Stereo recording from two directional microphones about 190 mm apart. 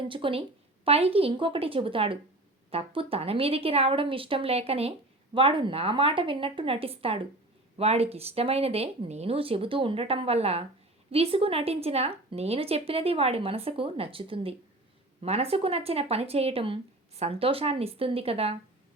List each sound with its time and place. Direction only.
0.1 s speech: 30° right (ahead or behind)